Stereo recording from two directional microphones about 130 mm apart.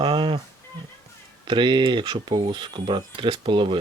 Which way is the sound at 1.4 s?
35° right (ahead or behind).